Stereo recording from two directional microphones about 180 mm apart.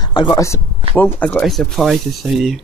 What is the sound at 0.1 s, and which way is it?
Speech, 25° left (ahead or behind).